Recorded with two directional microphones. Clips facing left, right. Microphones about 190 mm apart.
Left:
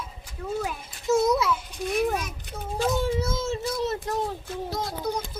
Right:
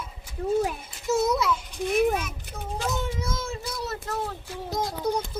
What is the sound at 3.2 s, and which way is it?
Child singing, 25° left (ahead or behind).